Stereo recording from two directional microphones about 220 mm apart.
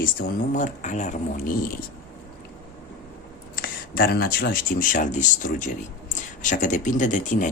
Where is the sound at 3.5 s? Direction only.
40° left (ahead or behind).